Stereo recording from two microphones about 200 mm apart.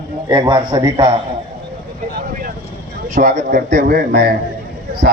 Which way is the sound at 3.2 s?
45° right (ahead or behind).